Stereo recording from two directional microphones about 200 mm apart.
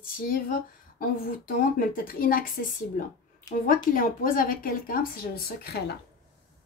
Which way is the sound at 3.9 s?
45° left (ahead or behind).